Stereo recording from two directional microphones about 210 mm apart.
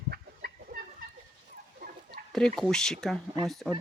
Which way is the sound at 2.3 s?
Centre (ahead or behind).